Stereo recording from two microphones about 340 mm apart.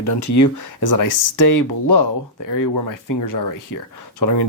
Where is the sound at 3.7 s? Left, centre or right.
Left.